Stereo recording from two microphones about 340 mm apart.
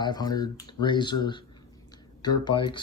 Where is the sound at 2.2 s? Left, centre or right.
Centre.